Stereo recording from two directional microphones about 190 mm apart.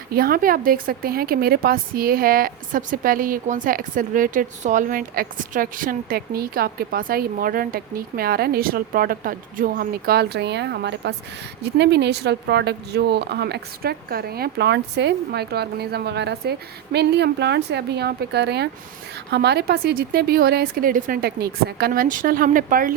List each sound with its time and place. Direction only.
0.1 s a woman's voice: 50° right (ahead or behind)